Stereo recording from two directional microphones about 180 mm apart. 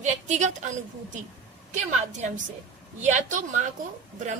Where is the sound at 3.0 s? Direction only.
45° right (ahead or behind).